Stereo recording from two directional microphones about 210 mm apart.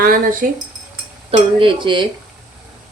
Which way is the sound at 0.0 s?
40° right (ahead or behind).